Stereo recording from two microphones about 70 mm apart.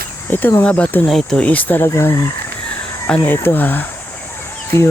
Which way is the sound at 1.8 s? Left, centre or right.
Left.